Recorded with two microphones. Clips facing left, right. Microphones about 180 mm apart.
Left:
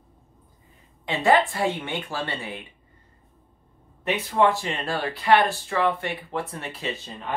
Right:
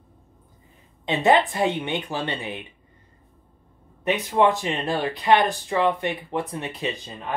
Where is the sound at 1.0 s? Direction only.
20° right (ahead or behind).